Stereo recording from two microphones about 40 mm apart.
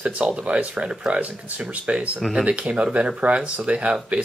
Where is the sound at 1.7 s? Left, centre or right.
Right.